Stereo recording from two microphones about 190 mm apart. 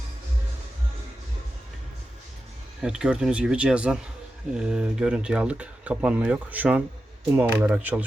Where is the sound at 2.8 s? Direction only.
5° right (ahead or behind).